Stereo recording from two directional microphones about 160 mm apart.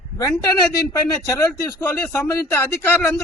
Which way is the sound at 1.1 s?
20° left (ahead or behind).